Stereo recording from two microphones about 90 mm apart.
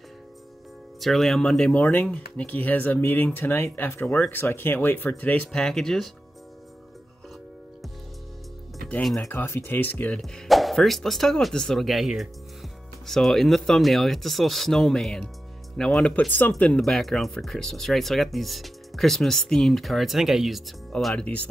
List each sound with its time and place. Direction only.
1.0 s speech: centre (ahead or behind)
1.8 s speech: 20° left (ahead or behind)
5.5 s speech: 5° left (ahead or behind)
9.0 s speech: centre (ahead or behind)
9.3 s speech: 25° left (ahead or behind)
10.2 s speech: centre (ahead or behind)